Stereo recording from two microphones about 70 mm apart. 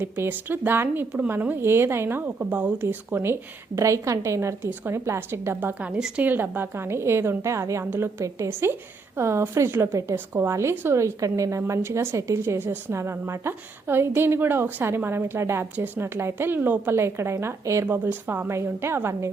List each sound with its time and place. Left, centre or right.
0.0 s a woman's voice: right
3.8 s a woman's voice: right
5.5 s speech: right
6.3 s a woman's voice: right
16.9 s a woman's voice: right
17.8 s speech: right
18.4 s a woman's voice: right